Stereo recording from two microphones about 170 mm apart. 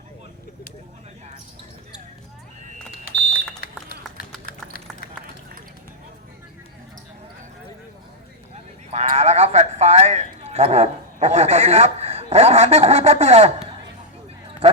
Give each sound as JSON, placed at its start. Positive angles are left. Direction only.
{"t": 3.0, "sound": "smoke detector", "side_deg": 60}
{"t": 4.4, "sound": "a sound", "side_deg": 60}
{"t": 8.9, "sound": "speech", "side_deg": -40}
{"t": 14.6, "sound": "speech", "side_deg": -35}